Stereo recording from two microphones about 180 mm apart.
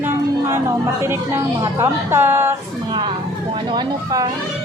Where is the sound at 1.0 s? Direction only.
15° right (ahead or behind).